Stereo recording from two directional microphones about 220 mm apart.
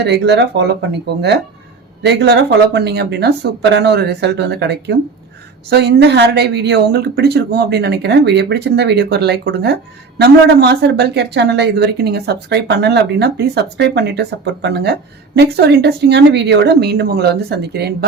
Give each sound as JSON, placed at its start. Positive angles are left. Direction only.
{"t": 0.0, "sound": "speech", "side_deg": -50}